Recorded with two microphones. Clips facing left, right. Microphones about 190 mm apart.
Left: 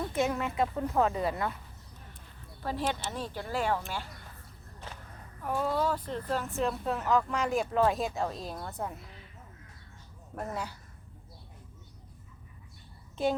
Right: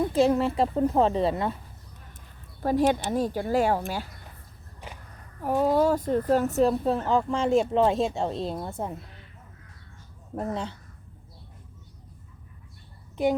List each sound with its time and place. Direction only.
0.1 s speech: 30° right (ahead or behind)
2.6 s speech: 45° right (ahead or behind)
4.8 s a sound: 15° right (ahead or behind)
5.4 s speech: 40° right (ahead or behind); by 9.0 s 25° right (ahead or behind)
10.3 s speech: 25° right (ahead or behind)